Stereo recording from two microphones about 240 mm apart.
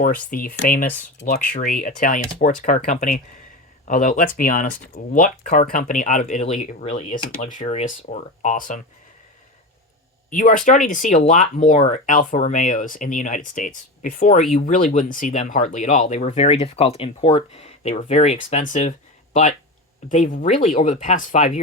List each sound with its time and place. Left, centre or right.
0.0 s speech: left
10.2 s speech: left